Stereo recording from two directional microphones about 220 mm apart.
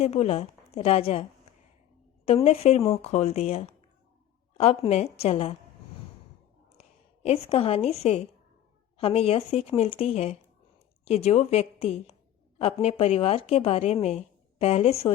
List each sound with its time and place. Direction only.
0.0 s a woman's voice: 30° left (ahead or behind)
2.2 s a woman's voice: 25° left (ahead or behind)
6.7 s a woman's voice: 30° left (ahead or behind)